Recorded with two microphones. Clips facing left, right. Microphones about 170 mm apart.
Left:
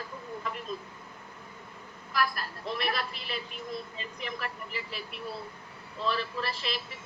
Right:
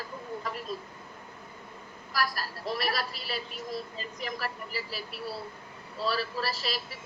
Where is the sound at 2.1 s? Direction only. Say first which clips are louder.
Left 1 dB; 40° right (ahead or behind).